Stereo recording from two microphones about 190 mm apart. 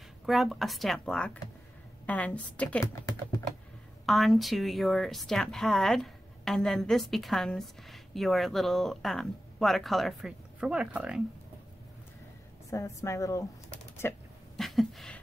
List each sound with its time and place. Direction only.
0.3 s a woman's voice: centre (ahead or behind)
2.8 s speech: 20° left (ahead or behind)
4.0 s speech: centre (ahead or behind)
12.6 s a woman's voice: 15° left (ahead or behind)
14.6 s a sound: centre (ahead or behind)